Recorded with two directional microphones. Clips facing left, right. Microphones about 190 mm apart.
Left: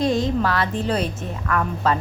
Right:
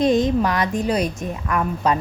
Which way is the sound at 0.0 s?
20° right (ahead or behind).